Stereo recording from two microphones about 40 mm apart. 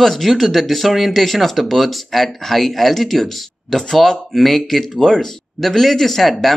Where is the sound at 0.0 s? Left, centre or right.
Centre.